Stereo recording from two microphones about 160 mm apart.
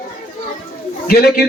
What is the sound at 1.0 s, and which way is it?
Speech, 70° left (ahead or behind).